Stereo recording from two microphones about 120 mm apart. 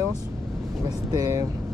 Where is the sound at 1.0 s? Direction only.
25° right (ahead or behind).